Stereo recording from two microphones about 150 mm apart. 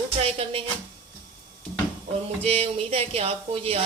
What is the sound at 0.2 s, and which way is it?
Speech, 40° right (ahead or behind).